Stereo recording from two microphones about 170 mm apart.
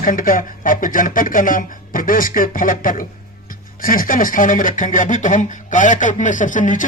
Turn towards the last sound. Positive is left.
turn(degrees=50)  # may be behind; listen again after turning